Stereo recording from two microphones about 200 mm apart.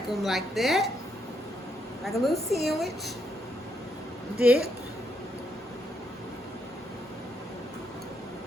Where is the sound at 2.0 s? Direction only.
Centre (ahead or behind).